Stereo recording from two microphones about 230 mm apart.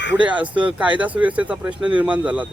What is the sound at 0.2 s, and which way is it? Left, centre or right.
Speech, centre.